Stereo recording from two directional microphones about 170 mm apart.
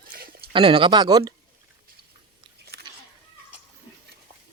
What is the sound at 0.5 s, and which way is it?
Speech, 30° right (ahead or behind).